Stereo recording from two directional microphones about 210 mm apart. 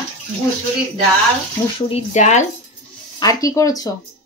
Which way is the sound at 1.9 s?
35° left (ahead or behind).